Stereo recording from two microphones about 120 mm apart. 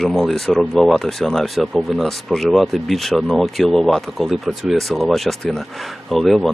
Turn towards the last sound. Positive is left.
turn(degrees=0)  # may be behind; listen again after turning